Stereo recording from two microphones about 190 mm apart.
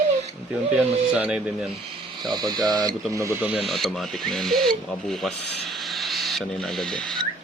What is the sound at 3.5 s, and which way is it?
Speech, centre (ahead or behind).